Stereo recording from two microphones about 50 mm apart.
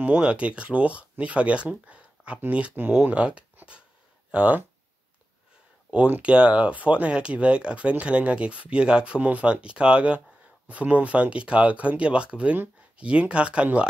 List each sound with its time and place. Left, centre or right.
0.0 s speech: right
6.2 s speech: right